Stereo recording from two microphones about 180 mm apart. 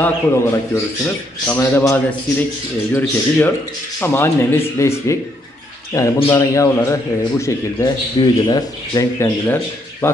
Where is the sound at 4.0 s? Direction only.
15° left (ahead or behind).